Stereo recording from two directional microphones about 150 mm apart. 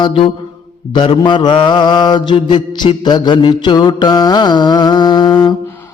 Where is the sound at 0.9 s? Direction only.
30° left (ahead or behind).